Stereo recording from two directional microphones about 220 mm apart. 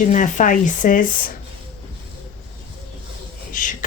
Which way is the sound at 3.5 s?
35° left (ahead or behind).